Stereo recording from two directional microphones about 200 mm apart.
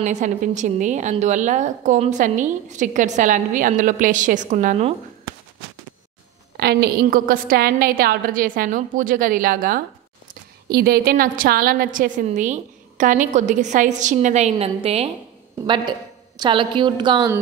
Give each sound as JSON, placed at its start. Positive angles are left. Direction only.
{"t": 0.0, "sound": "a woman's voice", "side_deg": -35}
{"t": 6.5, "sound": "a woman's voice", "side_deg": -55}